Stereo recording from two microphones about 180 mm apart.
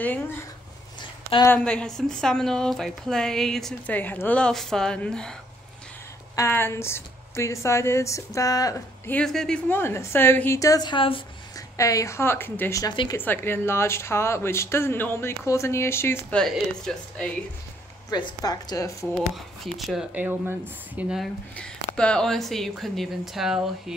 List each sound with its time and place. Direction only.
0.0 s speech: 10° left (ahead or behind)
1.5 s speech: 5° left (ahead or behind)
6.3 s speech: 15° left (ahead or behind); by 11.6 s 30° left (ahead or behind)
11.7 s speech: 15° left (ahead or behind)
13.2 s speech: 10° left (ahead or behind)
18.1 s a woman's voice: 25° left (ahead or behind)
19.1 s speech: centre (ahead or behind)
21.9 s speech: 5° left (ahead or behind)